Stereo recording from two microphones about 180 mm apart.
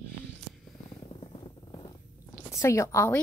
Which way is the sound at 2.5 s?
15° left (ahead or behind).